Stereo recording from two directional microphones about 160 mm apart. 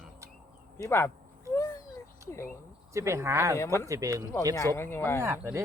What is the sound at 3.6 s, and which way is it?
Speech, 15° left (ahead or behind).